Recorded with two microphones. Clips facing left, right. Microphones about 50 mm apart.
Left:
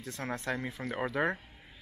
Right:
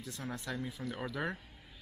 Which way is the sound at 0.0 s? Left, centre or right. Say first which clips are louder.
Left 5 dB; left.